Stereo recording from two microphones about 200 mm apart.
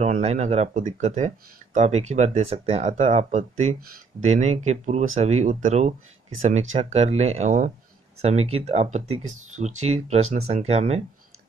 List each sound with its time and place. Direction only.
0.0 s speech: 35° right (ahead or behind)